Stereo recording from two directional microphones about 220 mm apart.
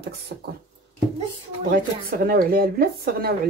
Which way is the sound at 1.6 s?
45° right (ahead or behind).